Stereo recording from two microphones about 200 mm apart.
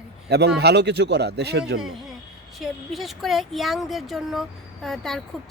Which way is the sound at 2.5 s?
Centre (ahead or behind).